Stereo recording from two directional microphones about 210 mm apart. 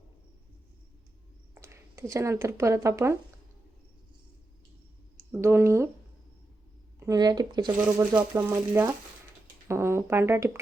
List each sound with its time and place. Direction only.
1.6 s speech: 15° right (ahead or behind)
5.3 s a sound: 10° right (ahead or behind)
7.0 s speech: 15° right (ahead or behind)